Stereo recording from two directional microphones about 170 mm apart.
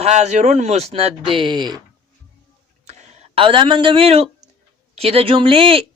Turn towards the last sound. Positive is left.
turn(degrees=-30)  # may be behind; listen again after turning